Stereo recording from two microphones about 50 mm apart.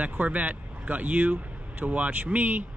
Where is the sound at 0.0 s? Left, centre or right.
Right.